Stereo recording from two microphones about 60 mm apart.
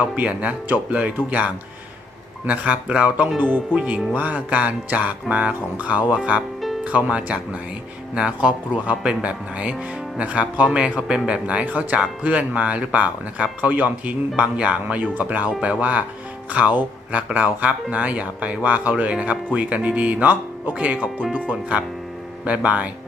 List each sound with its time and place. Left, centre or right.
0.2 s speech: right